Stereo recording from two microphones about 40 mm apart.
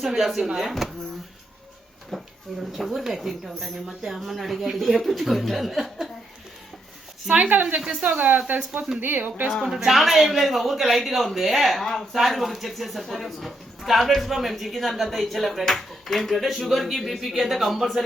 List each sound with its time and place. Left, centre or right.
0.0 s speech: centre
0.7 s speech: centre
2.0 s speech: centre
7.5 s a woman's voice: right
9.6 s speech: centre
11.8 s speech: centre
12.1 s speech: centre